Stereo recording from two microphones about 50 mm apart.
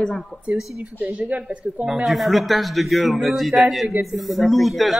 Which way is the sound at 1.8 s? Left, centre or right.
Centre.